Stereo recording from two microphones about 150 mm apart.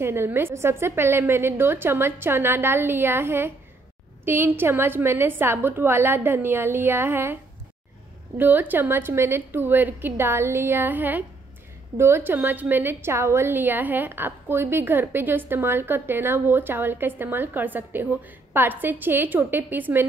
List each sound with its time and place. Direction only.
0.0 s a woman's voice: 15° right (ahead or behind)
8.4 s a woman's voice: 10° right (ahead or behind)